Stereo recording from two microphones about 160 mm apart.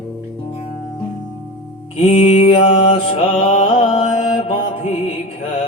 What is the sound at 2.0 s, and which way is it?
Mantra, 35° left (ahead or behind).